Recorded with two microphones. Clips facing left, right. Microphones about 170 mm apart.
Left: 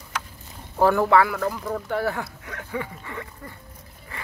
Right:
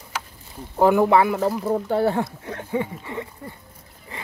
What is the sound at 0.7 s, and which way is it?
Speech, 15° right (ahead or behind).